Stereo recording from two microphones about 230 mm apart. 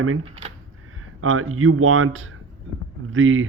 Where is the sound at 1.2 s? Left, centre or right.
Right.